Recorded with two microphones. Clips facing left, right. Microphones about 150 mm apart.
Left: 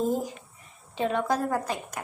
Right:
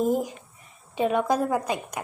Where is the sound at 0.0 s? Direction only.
15° right (ahead or behind).